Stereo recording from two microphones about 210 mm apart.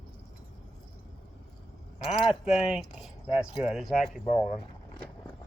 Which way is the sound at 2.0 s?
Centre (ahead or behind).